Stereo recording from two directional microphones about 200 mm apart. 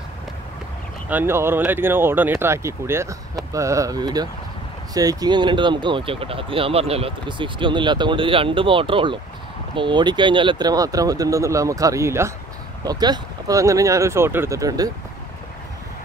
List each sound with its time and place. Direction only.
1.1 s speech: 10° right (ahead or behind)